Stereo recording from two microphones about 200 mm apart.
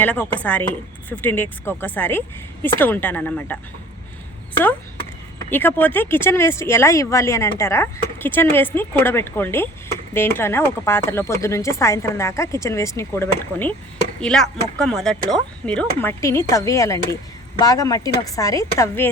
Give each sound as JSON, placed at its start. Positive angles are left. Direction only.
{"t": 0.0, "sound": "speech", "side_deg": 5}
{"t": 5.5, "sound": "speech", "side_deg": 10}